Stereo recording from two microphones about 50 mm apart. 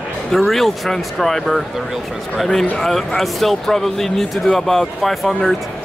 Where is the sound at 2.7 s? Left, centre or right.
Centre.